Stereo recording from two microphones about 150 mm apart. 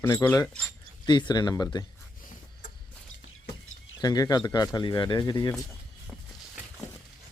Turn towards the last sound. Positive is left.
turn(degrees=25)  # may be behind; listen again after turning